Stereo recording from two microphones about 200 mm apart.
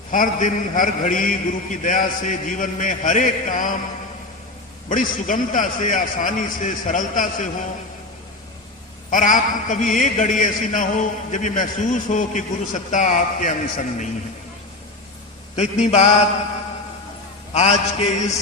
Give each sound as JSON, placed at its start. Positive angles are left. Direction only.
{"t": 0.1, "sound": "a man's voice", "side_deg": 40}
{"t": 4.9, "sound": "a man's voice", "side_deg": 40}
{"t": 9.0, "sound": "a man's voice", "side_deg": 40}
{"t": 15.5, "sound": "a man's voice", "side_deg": 35}
{"t": 17.5, "sound": "a man's voice", "side_deg": 35}